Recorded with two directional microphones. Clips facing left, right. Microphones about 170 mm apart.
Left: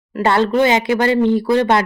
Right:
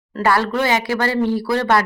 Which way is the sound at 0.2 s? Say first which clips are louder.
Left 4 dB; 25° left (ahead or behind).